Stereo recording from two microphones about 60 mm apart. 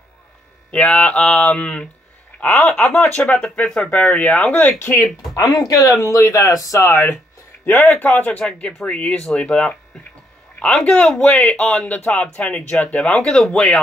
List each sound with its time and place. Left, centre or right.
0.7 s speech: centre
2.4 s speech: left
3.2 s speech: centre
4.7 s speech: left
5.0 s speech: left
7.6 s speech: left
7.9 s speech: left
13.1 s speech: centre